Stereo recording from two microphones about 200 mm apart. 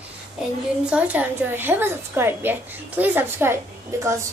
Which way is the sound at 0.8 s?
5° right (ahead or behind).